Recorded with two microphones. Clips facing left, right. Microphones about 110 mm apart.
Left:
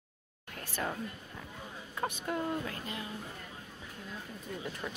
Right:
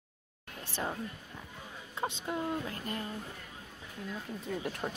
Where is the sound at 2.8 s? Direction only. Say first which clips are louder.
Right 3 dB; 45° right (ahead or behind).